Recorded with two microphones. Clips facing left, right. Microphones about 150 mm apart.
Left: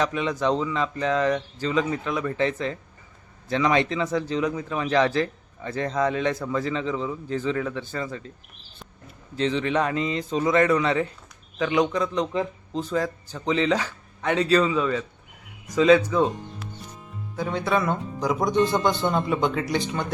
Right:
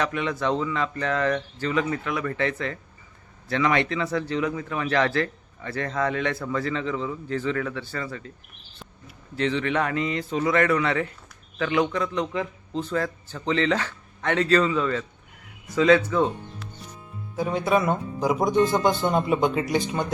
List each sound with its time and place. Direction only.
0.0 s a man's voice: 20° left (ahead or behind)
9.3 s a man's voice: 20° left (ahead or behind)
12.8 s a man's voice: 15° left (ahead or behind)
17.3 s speech: 15° right (ahead or behind)
18.5 s a man's voice: 20° left (ahead or behind)
19.0 s speech: 20° right (ahead or behind)